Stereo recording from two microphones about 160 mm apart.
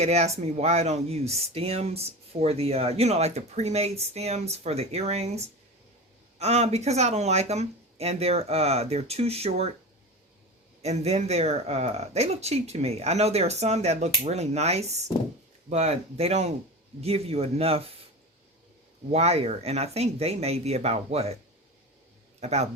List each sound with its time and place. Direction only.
0.0 s speech: 45° right (ahead or behind)
6.4 s speech: 40° right (ahead or behind)
10.8 s speech: 40° right (ahead or behind)
19.1 s speech: 40° right (ahead or behind)
22.4 s speech: 40° right (ahead or behind)